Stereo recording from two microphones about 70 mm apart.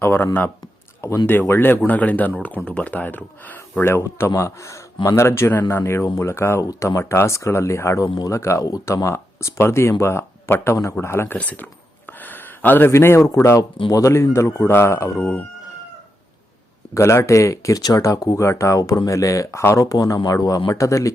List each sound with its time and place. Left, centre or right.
0.0 s speech: left
1.3 s speech: left
3.9 s speech: left
11.3 s a sound: left
12.9 s speech: left
15.2 s speech: centre
16.9 s speech: left
19.8 s speech: left